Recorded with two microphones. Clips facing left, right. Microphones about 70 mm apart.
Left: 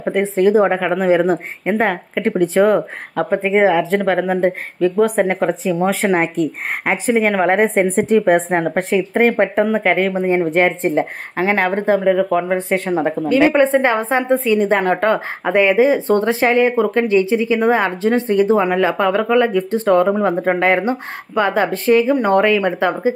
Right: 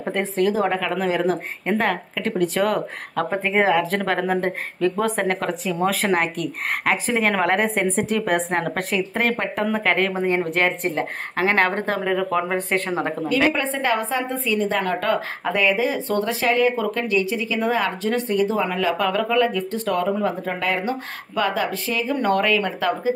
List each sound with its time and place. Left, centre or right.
0.0 s a woman's voice: centre
0.4 s a woman's voice: left
11.3 s speech: centre
13.6 s a woman's voice: left
22.2 s a woman's voice: left